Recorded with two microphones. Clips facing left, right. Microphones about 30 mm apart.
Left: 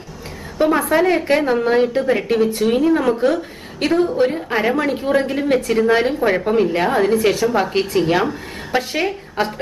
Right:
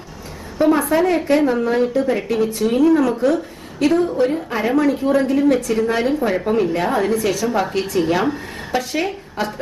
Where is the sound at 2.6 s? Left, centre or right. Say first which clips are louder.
Right 3 dB; left.